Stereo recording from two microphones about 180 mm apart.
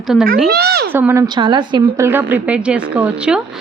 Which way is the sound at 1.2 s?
25° right (ahead or behind).